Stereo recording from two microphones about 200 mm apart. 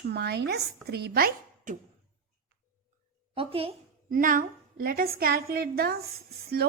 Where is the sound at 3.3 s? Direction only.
30° right (ahead or behind).